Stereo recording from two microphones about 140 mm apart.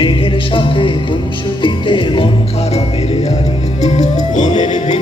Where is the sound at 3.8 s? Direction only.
55° left (ahead or behind).